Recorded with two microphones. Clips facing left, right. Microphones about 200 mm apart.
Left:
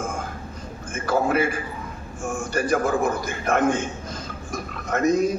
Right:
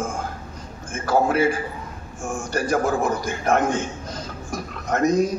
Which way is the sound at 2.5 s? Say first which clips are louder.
Even; 55° left (ahead or behind).